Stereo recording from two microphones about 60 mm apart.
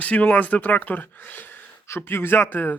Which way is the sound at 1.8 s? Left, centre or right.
Left.